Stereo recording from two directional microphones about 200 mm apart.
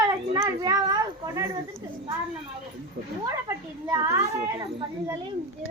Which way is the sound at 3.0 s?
50° right (ahead or behind).